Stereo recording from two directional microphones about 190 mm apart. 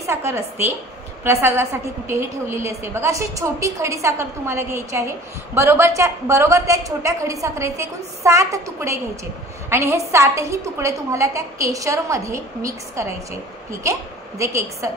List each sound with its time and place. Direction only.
0.0 s a woman's voice: 15° right (ahead or behind)
14.4 s a woman's voice: 15° right (ahead or behind)